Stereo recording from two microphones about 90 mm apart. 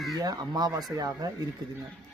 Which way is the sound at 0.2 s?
50° right (ahead or behind).